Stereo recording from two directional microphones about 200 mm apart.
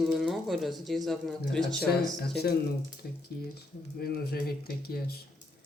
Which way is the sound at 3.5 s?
50° left (ahead or behind).